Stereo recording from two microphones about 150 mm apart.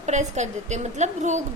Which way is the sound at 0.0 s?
50° right (ahead or behind).